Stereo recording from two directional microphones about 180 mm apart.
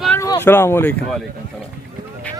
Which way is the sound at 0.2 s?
15° left (ahead or behind).